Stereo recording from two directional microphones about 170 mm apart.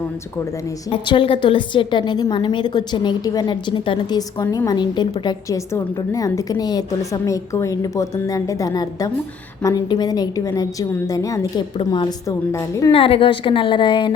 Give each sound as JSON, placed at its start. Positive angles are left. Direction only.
{"t": 0.9, "sound": "a woman's voice", "side_deg": 30}
{"t": 12.9, "sound": "a woman's voice", "side_deg": 35}